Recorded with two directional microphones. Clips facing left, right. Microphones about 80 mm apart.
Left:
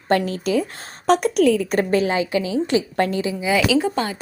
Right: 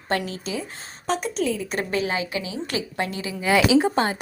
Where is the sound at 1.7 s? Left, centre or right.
Left.